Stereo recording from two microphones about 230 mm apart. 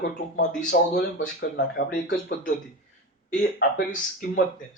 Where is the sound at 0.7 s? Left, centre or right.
Left.